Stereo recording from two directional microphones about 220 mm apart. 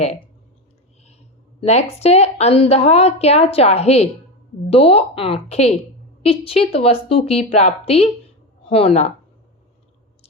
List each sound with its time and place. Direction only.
1.6 s a woman's voice: 30° left (ahead or behind)